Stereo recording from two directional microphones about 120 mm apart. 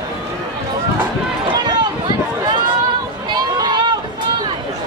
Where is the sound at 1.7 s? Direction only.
40° right (ahead or behind).